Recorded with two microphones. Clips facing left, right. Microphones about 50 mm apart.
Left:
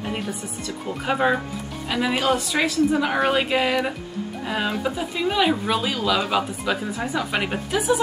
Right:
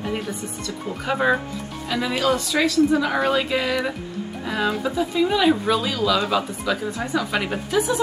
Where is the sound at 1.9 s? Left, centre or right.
Left.